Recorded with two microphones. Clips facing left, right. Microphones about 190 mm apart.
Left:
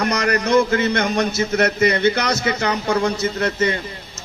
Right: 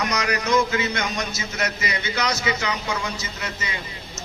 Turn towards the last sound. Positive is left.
turn(degrees=55)  # may be behind; listen again after turning